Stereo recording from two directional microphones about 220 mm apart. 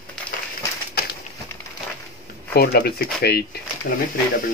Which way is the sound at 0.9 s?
45° left (ahead or behind).